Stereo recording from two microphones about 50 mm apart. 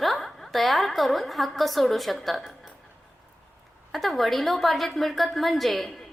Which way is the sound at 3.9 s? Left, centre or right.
Centre.